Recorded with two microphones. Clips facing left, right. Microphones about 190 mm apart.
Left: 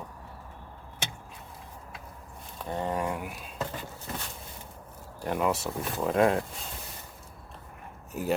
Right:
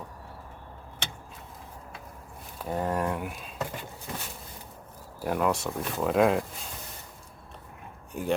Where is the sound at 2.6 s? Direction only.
5° right (ahead or behind).